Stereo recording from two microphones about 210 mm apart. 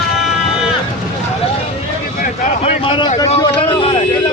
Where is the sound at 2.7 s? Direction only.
25° left (ahead or behind).